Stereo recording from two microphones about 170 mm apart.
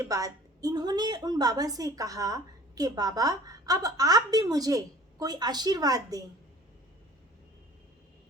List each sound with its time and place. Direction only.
0.0 s a woman's voice: 20° right (ahead or behind)